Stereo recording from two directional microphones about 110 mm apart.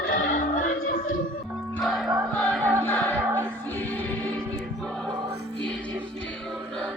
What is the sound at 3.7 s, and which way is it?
Music, 15° left (ahead or behind).